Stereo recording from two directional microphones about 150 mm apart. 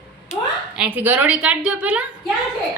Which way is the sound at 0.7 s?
10° right (ahead or behind).